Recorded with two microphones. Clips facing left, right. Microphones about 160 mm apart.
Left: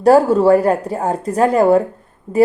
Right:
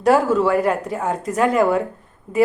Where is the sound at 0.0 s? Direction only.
35° left (ahead or behind).